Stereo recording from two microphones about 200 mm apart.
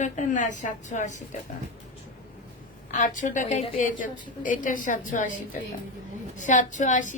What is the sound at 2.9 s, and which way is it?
A woman's voice, 40° left (ahead or behind).